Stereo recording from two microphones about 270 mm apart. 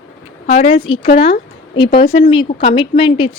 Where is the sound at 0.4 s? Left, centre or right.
Left.